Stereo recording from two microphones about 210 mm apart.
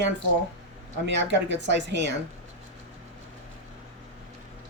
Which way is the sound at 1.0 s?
55° right (ahead or behind).